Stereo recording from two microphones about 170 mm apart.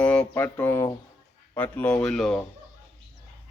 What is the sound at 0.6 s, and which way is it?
Speech, 15° left (ahead or behind).